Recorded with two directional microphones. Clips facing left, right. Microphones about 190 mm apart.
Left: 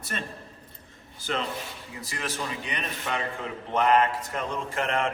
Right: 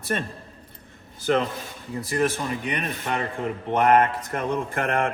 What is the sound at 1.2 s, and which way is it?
Speech, 55° right (ahead or behind).